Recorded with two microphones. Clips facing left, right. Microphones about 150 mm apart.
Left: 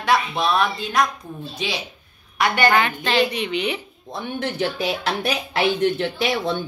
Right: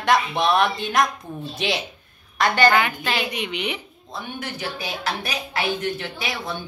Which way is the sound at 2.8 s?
10° right (ahead or behind).